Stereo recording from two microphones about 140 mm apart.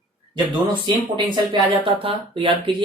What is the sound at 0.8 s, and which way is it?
Speech, 35° right (ahead or behind).